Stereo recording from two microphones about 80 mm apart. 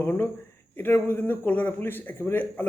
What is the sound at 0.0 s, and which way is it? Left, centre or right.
A man's voice, left.